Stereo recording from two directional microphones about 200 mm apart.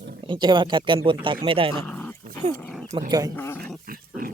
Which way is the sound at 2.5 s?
5° left (ahead or behind).